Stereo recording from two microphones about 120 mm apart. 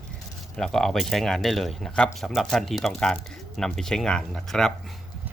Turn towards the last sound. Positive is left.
turn(degrees=5)  # may be behind; listen again after turning